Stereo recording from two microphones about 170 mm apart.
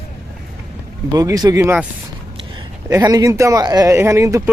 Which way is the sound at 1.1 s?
20° right (ahead or behind).